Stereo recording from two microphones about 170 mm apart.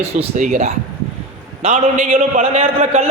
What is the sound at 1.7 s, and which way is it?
Speech, 50° right (ahead or behind).